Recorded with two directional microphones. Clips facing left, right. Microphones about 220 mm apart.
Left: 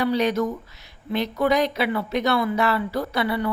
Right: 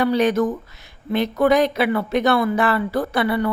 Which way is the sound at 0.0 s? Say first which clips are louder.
Right 4 dB; 50° right (ahead or behind).